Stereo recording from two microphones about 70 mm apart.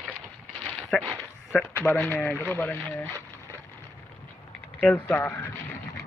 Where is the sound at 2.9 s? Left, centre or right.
Left.